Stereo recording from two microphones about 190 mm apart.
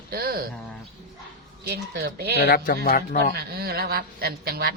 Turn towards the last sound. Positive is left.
turn(degrees=-55)  # may be behind; listen again after turning